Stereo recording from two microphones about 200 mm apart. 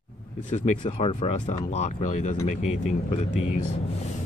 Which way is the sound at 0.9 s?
25° left (ahead or behind).